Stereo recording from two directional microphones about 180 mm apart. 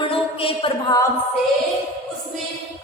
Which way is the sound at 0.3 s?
30° left (ahead or behind).